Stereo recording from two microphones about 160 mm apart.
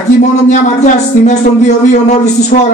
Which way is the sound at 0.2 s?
50° left (ahead or behind).